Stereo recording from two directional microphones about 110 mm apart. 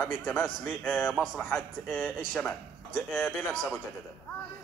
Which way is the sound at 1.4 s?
20° left (ahead or behind).